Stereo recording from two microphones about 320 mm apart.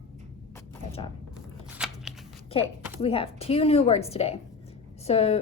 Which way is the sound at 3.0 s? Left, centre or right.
Centre.